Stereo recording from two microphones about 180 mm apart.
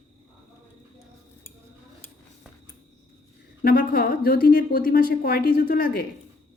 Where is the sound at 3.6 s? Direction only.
55° left (ahead or behind).